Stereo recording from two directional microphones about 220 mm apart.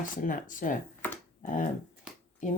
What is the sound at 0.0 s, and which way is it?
Speech, 35° left (ahead or behind).